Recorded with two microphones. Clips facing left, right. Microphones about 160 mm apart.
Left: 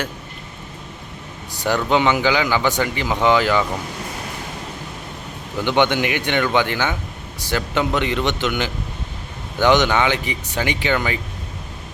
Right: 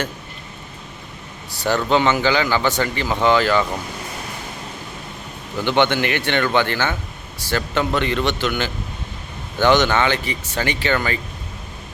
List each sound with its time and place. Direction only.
1.5 s speech: 15° left (ahead or behind)
5.5 s speech: 15° left (ahead or behind)